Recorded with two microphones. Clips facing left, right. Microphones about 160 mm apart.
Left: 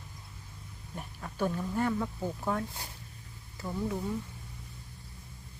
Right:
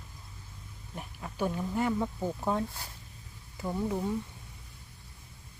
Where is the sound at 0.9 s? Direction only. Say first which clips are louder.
Even; 10° right (ahead or behind).